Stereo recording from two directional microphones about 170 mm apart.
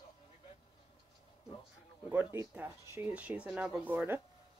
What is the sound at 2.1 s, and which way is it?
Speech, 15° right (ahead or behind).